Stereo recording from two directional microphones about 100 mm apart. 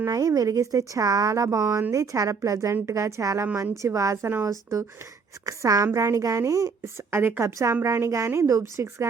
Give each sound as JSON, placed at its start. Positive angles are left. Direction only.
{"t": 0.0, "sound": "a woman's voice", "side_deg": -35}